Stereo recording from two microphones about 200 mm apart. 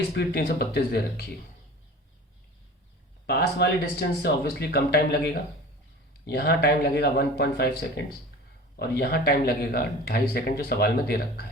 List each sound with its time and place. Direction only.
0.1 s speech: 55° left (ahead or behind)
3.2 s a man's voice: 55° left (ahead or behind)